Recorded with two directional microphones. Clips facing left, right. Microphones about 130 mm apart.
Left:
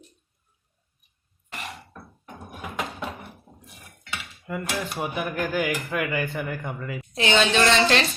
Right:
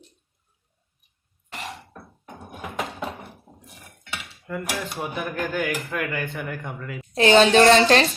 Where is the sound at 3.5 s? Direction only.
15° right (ahead or behind).